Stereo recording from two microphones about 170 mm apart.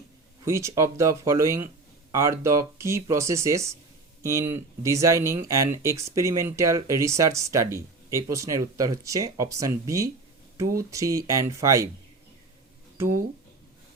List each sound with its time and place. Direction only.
0.4 s speech: 15° right (ahead or behind)